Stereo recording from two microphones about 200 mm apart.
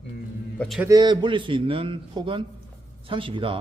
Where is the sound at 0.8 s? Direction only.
20° right (ahead or behind).